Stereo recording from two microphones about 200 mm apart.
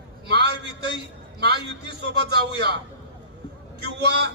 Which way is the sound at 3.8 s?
55° right (ahead or behind).